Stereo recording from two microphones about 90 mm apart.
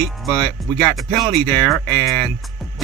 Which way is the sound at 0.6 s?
Centre (ahead or behind).